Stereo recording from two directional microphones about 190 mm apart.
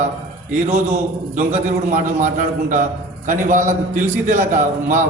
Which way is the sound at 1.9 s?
40° right (ahead or behind).